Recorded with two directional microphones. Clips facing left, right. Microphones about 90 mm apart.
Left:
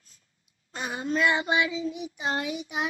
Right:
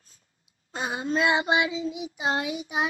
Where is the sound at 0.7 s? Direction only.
25° right (ahead or behind).